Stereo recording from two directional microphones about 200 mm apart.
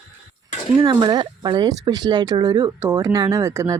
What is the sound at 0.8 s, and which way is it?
Speech, 20° right (ahead or behind).